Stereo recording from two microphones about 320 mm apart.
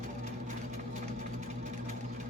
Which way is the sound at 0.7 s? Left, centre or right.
Right.